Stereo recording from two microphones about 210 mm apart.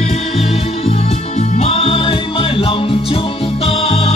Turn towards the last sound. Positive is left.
turn(degrees=30)  # may be behind; listen again after turning